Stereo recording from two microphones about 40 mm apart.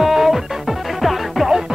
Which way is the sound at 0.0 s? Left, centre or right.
Centre.